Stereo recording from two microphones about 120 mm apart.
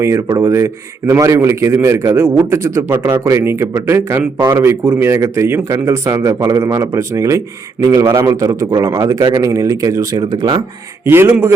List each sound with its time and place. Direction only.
0.0 s speech: 25° right (ahead or behind)